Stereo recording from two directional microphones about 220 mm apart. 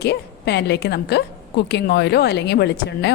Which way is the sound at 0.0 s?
50° left (ahead or behind).